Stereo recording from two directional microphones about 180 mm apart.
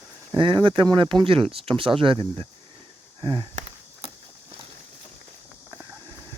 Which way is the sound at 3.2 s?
25° right (ahead or behind).